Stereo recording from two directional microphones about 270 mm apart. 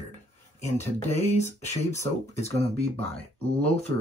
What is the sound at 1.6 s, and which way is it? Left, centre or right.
Speech, left.